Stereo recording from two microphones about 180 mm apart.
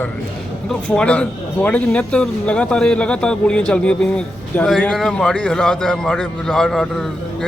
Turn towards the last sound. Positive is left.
turn(degrees=0)  # may be behind; listen again after turning